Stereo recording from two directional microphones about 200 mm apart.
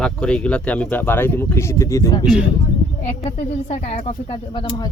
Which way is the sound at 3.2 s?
30° left (ahead or behind).